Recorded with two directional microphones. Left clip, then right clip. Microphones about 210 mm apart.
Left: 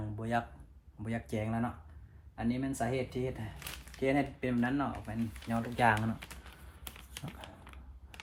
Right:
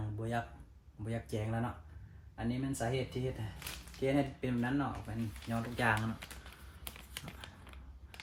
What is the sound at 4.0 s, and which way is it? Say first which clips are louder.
Speech: left 2 dB; 20° left (ahead or behind).